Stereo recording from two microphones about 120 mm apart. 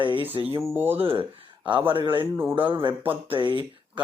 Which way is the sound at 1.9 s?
45° right (ahead or behind).